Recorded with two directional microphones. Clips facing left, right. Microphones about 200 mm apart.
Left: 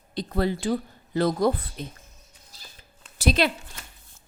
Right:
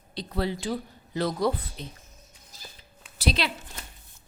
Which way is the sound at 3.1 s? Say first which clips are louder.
Left 5 dB; 50° left (ahead or behind).